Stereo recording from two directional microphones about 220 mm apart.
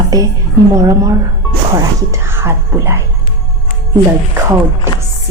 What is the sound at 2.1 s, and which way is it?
Speech, 10° right (ahead or behind).